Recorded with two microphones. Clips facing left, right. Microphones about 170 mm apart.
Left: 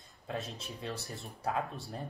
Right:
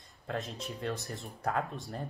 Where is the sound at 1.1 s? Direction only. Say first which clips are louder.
Right 1 dB; 5° left (ahead or behind).